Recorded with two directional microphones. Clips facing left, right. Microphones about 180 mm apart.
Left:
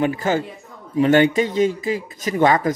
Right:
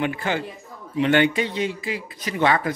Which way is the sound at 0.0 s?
40° left (ahead or behind).